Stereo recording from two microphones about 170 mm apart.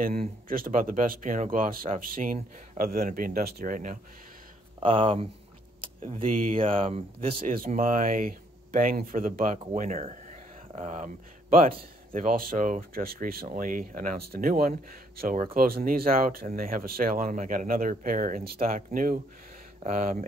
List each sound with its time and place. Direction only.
0.0 s speech: 60° right (ahead or behind)
4.7 s speech: 30° right (ahead or behind)
7.4 s speech: 55° right (ahead or behind)
9.8 s speech: 40° right (ahead or behind)
19.8 s speech: 40° right (ahead or behind)